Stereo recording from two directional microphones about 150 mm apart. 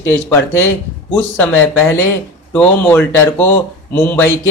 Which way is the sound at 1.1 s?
15° left (ahead or behind).